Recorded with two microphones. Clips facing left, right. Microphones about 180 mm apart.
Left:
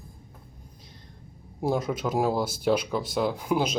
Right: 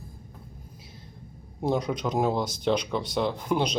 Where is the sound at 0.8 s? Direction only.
5° right (ahead or behind).